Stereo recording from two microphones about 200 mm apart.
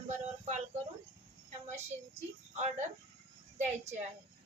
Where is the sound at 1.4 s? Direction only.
35° right (ahead or behind).